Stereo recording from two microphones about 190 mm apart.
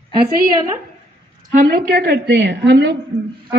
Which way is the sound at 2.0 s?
55° right (ahead or behind).